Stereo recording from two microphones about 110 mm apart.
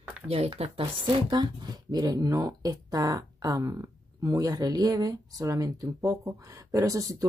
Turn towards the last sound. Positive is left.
turn(degrees=-30)  # may be behind; listen again after turning